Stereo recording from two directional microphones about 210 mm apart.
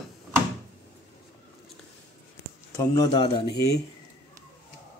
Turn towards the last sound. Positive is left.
turn(degrees=20)  # may be behind; listen again after turning